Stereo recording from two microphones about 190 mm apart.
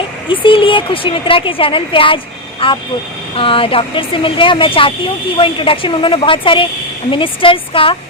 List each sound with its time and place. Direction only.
0.3 s speech: 25° left (ahead or behind)